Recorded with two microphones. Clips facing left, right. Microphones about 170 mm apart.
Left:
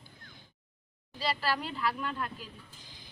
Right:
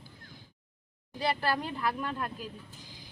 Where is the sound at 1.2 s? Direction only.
55° right (ahead or behind).